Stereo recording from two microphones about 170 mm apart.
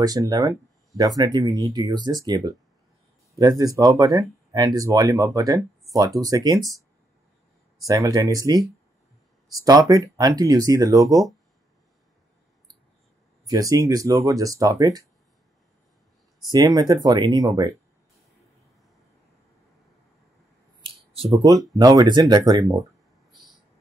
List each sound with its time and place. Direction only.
0.0 s speech: 20° right (ahead or behind)
7.8 s speech: 20° right (ahead or behind)
13.5 s speech: 20° right (ahead or behind)
16.5 s speech: 25° right (ahead or behind)
20.8 s a sound: 30° right (ahead or behind)
21.7 s speech: 20° right (ahead or behind)